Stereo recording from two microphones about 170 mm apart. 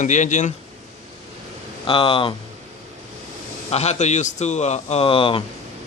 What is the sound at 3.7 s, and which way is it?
Speech, 40° left (ahead or behind).